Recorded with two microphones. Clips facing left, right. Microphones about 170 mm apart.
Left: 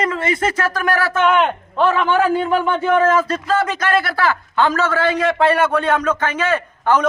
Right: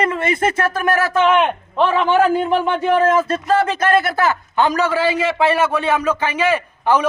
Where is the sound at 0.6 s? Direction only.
25° right (ahead or behind).